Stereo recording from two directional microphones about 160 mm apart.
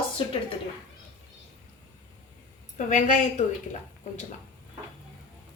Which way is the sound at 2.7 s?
50° left (ahead or behind).